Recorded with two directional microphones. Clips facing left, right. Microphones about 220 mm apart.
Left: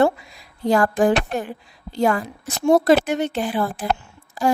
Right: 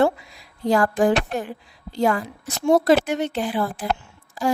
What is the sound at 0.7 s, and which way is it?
Speech, 50° left (ahead or behind).